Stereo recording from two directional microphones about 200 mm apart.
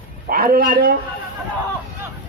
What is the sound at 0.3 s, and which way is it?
Speech, 45° right (ahead or behind).